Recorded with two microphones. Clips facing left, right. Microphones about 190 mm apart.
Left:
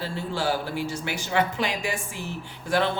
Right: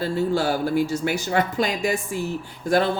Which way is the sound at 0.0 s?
45° right (ahead or behind).